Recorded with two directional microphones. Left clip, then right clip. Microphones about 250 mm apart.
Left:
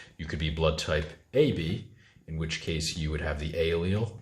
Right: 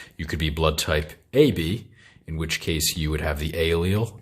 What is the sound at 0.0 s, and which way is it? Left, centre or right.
Speech, right.